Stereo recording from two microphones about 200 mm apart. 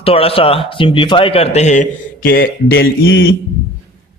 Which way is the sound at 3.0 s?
75° left (ahead or behind).